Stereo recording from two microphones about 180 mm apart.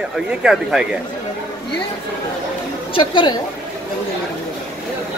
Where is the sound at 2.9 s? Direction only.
30° left (ahead or behind).